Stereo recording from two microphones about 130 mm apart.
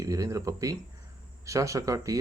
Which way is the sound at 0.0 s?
25° right (ahead or behind).